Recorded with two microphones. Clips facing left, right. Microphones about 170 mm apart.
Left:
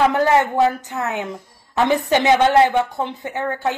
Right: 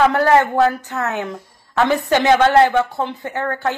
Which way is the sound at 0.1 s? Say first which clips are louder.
Right 2 dB; 20° left (ahead or behind).